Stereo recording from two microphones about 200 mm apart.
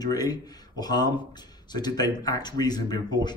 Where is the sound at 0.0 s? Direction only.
20° left (ahead or behind).